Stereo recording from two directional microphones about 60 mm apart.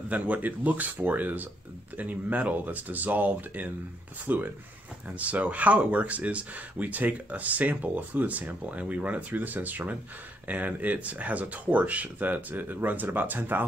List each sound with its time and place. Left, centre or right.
0.1 s speech: right